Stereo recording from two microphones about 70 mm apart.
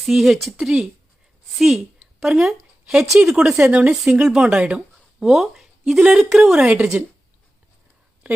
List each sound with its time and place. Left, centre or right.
0.0 s speech: centre
2.0 s a sound: centre
3.2 s speech: centre
3.7 s speech: centre
5.2 s a woman's voice: centre
6.9 s speech: right